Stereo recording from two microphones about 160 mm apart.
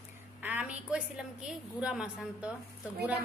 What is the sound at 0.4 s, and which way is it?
A woman's voice, 10° right (ahead or behind).